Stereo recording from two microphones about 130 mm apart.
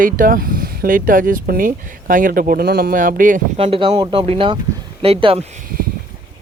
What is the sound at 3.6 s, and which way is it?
Speech, 45° right (ahead or behind).